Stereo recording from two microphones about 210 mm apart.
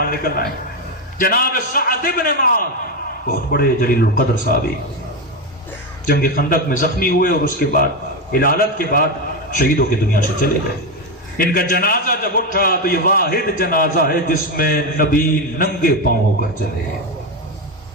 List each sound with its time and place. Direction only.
0.0 s a man's voice: 45° left (ahead or behind)
6.1 s a man's voice: 45° left (ahead or behind)